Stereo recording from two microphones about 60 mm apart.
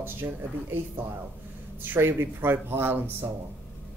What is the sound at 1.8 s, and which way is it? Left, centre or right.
Speech, right.